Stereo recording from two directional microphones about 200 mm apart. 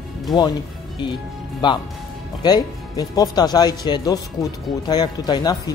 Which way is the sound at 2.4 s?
20° left (ahead or behind).